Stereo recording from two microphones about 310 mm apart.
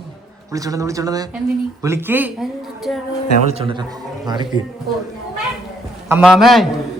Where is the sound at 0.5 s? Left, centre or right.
Centre.